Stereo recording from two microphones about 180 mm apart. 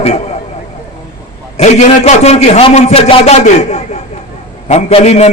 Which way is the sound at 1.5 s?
35° left (ahead or behind).